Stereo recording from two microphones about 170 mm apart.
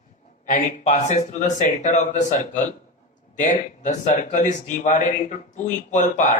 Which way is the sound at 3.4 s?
45° left (ahead or behind).